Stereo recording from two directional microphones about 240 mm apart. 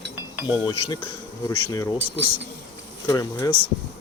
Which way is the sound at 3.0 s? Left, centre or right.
Centre.